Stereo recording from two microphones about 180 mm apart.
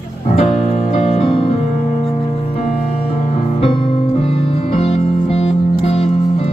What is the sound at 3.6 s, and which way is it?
Music, 30° left (ahead or behind).